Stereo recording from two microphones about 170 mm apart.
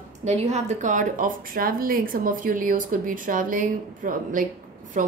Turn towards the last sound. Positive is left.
turn(degrees=-50)  # may be behind; listen again after turning